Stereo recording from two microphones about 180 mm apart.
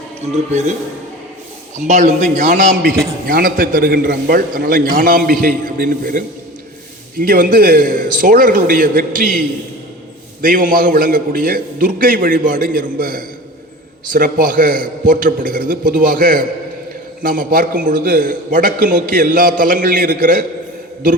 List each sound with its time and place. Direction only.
0.2 s a man's voice: 40° right (ahead or behind)
1.7 s a man's voice: 40° right (ahead or behind)
10.4 s a man's voice: 50° right (ahead or behind)